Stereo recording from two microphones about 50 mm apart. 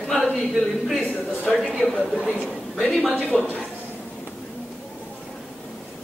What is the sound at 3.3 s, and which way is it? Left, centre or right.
Speech, centre.